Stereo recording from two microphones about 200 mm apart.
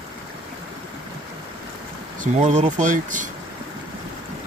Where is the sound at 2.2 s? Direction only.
40° right (ahead or behind).